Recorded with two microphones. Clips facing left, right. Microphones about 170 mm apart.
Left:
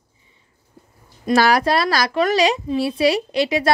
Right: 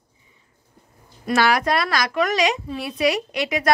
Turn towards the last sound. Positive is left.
turn(degrees=30)  # may be behind; listen again after turning